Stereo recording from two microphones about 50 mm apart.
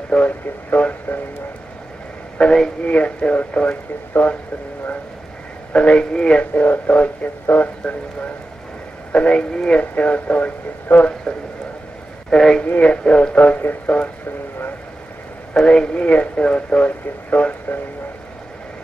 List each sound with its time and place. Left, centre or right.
0.1 s speech: centre
0.7 s speech: left
2.4 s speech: left
5.7 s speech: left
6.5 s speech: left
9.1 s speech: left
9.8 s speech: left
12.3 s speech: centre
12.6 s speech: left
15.6 s speech: left